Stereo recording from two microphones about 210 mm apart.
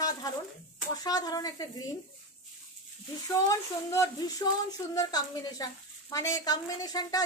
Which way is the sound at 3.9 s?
15° left (ahead or behind).